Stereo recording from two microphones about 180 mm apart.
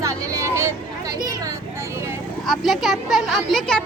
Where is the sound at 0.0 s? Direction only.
15° right (ahead or behind).